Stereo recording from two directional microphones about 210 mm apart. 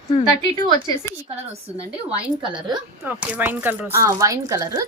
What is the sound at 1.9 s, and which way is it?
Speech, 5° right (ahead or behind).